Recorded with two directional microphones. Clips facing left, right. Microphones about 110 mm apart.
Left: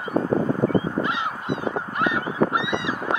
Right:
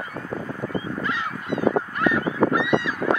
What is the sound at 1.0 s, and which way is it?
Honk, 20° left (ahead or behind).